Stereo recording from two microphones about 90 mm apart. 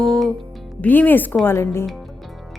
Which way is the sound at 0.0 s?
Centre (ahead or behind).